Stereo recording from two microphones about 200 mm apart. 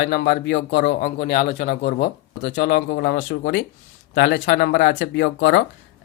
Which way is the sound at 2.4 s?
60° left (ahead or behind).